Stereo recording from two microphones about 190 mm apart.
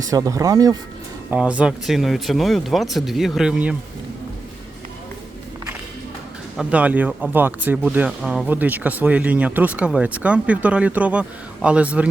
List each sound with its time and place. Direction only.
0.1 s speech: 15° right (ahead or behind)
1.3 s speech: 5° right (ahead or behind)
6.6 s speech: 5° right (ahead or behind)